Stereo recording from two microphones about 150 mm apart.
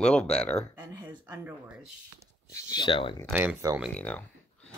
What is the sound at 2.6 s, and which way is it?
Speech, 30° left (ahead or behind).